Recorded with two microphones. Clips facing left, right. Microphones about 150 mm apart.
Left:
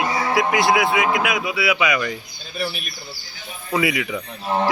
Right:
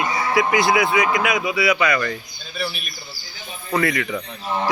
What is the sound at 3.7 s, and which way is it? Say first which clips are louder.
Speech: even; 10° left (ahead or behind).